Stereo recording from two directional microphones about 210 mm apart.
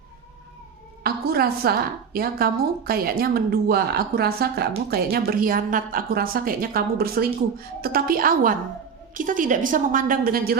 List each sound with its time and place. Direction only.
1.0 s a woman's voice: 45° right (ahead or behind)